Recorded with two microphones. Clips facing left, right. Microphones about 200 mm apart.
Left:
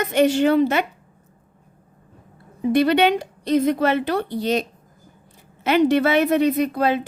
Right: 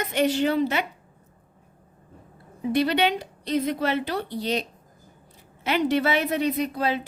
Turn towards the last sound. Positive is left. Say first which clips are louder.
# left 5 dB
turn(degrees=55)  # may be behind; listen again after turning